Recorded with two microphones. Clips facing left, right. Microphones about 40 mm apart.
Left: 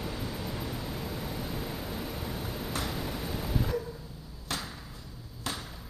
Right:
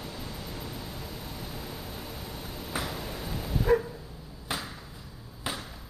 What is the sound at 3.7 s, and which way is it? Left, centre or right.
Dog, right.